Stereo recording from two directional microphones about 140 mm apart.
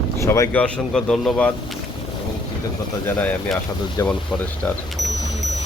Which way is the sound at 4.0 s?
20° left (ahead or behind).